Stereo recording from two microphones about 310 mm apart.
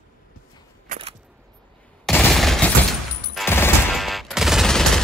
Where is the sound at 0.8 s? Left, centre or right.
Centre.